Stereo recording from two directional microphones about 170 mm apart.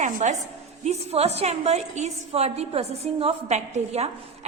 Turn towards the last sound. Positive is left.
turn(degrees=-40)  # may be behind; listen again after turning